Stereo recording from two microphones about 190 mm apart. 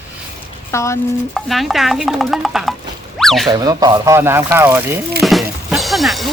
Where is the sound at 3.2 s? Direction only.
Centre (ahead or behind).